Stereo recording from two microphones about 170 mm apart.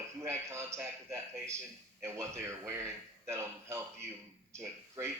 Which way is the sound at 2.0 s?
15° right (ahead or behind).